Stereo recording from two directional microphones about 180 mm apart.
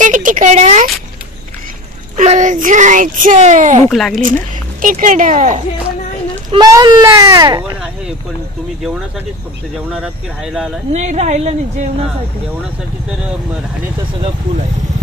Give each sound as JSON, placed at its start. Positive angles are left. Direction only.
{"t": 0.0, "sound": "speech", "side_deg": -45}
{"t": 2.1, "sound": "speech", "side_deg": -45}
{"t": 3.9, "sound": "speech", "side_deg": 0}
{"t": 4.8, "sound": "speech", "side_deg": -45}
{"t": 6.5, "sound": "speech", "side_deg": -20}
{"t": 9.8, "sound": "speech", "side_deg": -5}
{"t": 10.9, "sound": "a woman's voice", "side_deg": -40}